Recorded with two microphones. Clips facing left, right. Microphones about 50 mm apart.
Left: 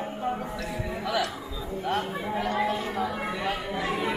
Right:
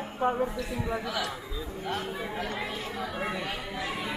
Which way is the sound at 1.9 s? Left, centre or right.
Centre.